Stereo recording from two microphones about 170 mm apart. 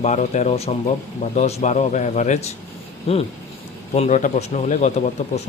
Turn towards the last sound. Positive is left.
turn(degrees=45)  # may be behind; listen again after turning